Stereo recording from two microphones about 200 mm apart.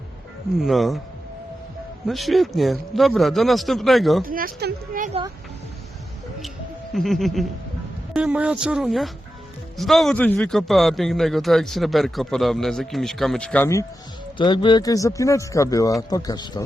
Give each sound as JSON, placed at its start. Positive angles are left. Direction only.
{"t": 0.6, "sound": "a man's voice", "side_deg": 0}
{"t": 2.0, "sound": "a man's voice", "side_deg": 0}
{"t": 4.2, "sound": "speech", "side_deg": -45}
{"t": 6.9, "sound": "a man's voice", "side_deg": 0}
{"t": 14.3, "sound": "speech", "side_deg": 25}